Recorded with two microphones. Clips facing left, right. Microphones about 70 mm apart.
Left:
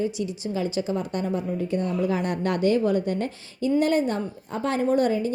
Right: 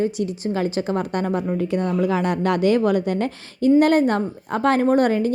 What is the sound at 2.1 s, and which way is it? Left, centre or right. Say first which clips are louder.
Speech: right 5 dB; right.